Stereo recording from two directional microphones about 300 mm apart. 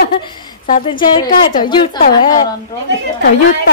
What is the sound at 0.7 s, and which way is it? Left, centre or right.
Speech, left.